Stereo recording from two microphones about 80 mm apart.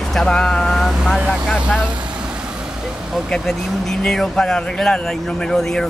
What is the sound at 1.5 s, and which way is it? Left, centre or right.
Speech, centre.